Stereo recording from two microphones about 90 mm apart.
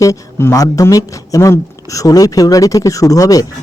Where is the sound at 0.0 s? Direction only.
35° left (ahead or behind).